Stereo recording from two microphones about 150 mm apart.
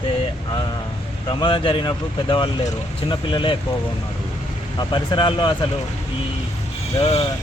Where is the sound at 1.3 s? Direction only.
35° left (ahead or behind).